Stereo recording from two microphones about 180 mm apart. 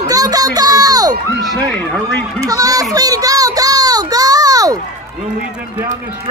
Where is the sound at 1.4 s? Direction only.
5° left (ahead or behind).